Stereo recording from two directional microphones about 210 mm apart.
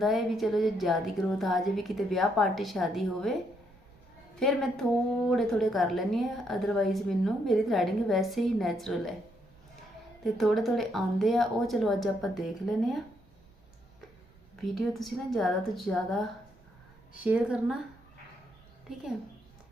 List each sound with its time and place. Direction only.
0.0 s a woman's voice: centre (ahead or behind)
4.4 s a woman's voice: centre (ahead or behind)
10.3 s a woman's voice: centre (ahead or behind)
14.6 s a woman's voice: centre (ahead or behind)
17.2 s a woman's voice: 5° right (ahead or behind)